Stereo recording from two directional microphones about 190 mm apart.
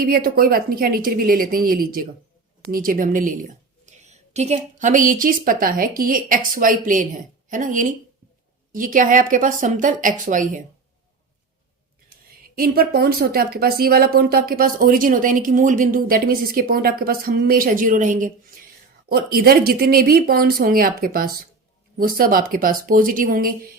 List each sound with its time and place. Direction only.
0.0 s speech: 50° right (ahead or behind)
12.5 s speech: 50° right (ahead or behind)